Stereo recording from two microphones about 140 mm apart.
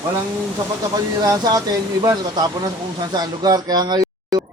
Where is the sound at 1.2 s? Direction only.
25° right (ahead or behind).